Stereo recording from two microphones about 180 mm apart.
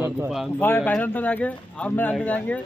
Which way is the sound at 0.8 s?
10° left (ahead or behind).